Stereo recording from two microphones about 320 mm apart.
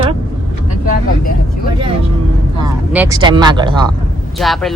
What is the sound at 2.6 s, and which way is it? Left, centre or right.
Speech, centre.